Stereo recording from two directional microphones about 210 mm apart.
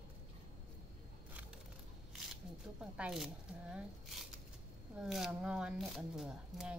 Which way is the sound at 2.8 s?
5° right (ahead or behind).